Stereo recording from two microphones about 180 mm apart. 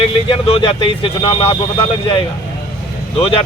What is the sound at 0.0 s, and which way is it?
Speech, 30° left (ahead or behind).